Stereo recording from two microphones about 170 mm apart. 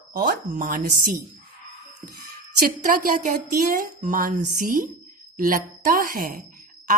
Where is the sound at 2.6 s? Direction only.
55° right (ahead or behind).